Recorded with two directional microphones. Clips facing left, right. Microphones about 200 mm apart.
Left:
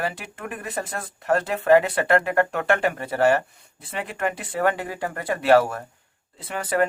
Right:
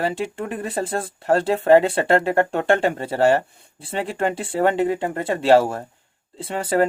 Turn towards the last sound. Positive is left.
turn(degrees=-30)  # may be behind; listen again after turning